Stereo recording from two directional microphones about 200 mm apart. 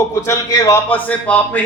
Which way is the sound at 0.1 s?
15° left (ahead or behind).